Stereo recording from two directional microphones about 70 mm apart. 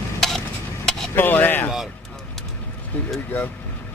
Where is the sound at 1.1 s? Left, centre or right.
Left.